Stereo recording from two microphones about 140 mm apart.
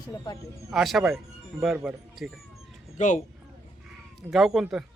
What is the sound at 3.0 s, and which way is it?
Speech, 60° left (ahead or behind).